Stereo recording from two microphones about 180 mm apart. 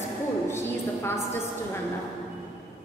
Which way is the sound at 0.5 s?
15° left (ahead or behind).